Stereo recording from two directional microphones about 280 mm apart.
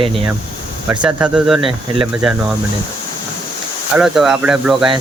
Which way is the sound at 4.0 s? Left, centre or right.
Centre.